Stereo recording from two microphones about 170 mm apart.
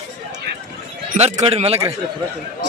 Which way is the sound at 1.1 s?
40° right (ahead or behind).